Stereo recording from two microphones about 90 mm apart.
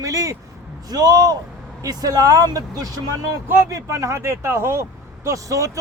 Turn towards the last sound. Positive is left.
turn(degrees=-35)  # may be behind; listen again after turning